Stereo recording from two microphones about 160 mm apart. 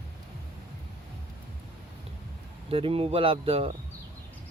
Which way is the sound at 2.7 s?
35° right (ahead or behind).